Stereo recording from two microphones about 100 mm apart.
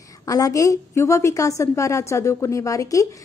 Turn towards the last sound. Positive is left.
turn(degrees=35)  # may be behind; listen again after turning